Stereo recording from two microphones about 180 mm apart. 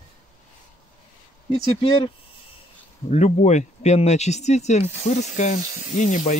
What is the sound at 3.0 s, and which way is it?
Speech, 40° left (ahead or behind).